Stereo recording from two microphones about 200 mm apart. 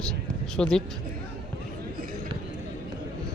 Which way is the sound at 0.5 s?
5° left (ahead or behind).